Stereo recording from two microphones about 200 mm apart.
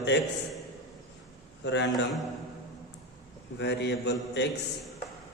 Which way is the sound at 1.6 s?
60° left (ahead or behind).